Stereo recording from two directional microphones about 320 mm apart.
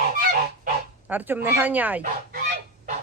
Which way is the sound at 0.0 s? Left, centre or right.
Right.